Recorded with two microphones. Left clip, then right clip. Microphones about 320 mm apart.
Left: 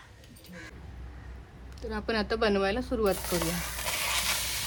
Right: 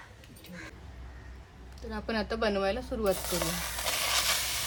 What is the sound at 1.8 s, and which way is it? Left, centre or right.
Speech, left.